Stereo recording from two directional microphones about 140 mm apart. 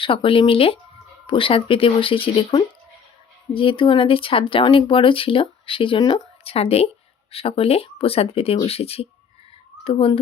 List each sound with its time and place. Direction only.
0.0 s speech: 40° left (ahead or behind)
6.4 s speech: 45° left (ahead or behind)